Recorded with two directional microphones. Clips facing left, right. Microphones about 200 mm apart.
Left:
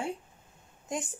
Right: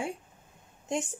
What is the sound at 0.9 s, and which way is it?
Speech, 25° right (ahead or behind).